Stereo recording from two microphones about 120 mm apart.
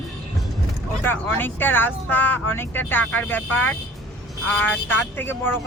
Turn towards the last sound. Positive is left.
turn(degrees=15)  # may be behind; listen again after turning